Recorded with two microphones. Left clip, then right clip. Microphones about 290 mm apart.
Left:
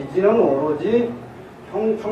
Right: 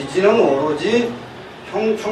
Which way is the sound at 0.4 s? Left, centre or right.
Left.